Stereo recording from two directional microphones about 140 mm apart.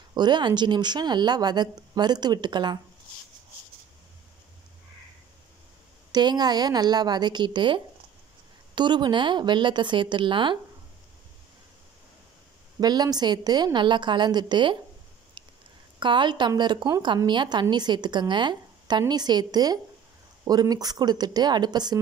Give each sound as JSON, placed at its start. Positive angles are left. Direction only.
{"t": 0.1, "sound": "a woman's voice", "side_deg": -30}
{"t": 6.1, "sound": "a woman's voice", "side_deg": -30}
{"t": 12.8, "sound": "a woman's voice", "side_deg": -30}
{"t": 15.4, "sound": "a sound", "side_deg": -35}
{"t": 16.0, "sound": "a woman's voice", "side_deg": -35}